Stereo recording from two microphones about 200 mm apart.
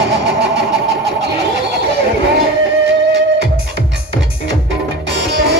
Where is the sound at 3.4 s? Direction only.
55° right (ahead or behind).